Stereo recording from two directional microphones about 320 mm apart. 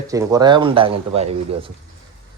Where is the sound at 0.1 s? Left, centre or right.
Centre.